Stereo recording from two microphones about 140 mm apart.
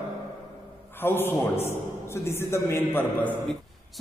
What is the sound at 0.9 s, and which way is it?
A man's voice, 15° left (ahead or behind).